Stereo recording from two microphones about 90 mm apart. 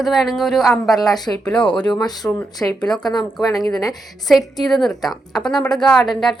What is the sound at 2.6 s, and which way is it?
Speech, 20° left (ahead or behind).